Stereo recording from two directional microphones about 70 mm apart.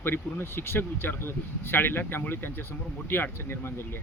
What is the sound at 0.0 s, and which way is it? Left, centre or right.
Speech, left.